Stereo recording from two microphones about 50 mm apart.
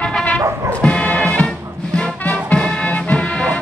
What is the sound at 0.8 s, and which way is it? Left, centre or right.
Music, centre.